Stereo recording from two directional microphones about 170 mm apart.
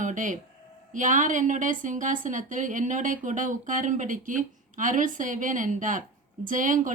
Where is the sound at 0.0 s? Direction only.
50° right (ahead or behind).